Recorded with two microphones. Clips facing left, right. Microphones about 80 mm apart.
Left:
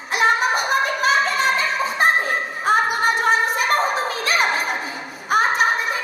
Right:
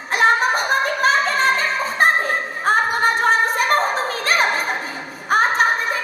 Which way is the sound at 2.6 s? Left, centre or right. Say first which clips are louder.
Right 1 dB; right.